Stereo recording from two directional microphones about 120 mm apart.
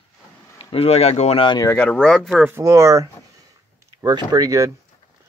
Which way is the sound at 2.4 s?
25° right (ahead or behind).